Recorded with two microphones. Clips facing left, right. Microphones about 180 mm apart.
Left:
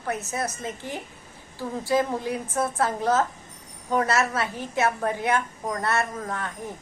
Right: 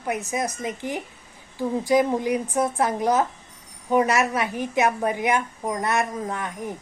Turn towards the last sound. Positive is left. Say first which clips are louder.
# right 3 dB
turn(degrees=-15)  # may be behind; listen again after turning